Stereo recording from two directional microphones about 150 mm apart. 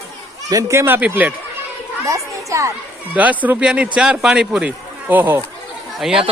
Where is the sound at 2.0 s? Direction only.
20° right (ahead or behind).